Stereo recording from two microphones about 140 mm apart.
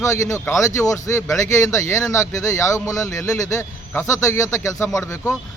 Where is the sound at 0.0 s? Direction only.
20° left (ahead or behind).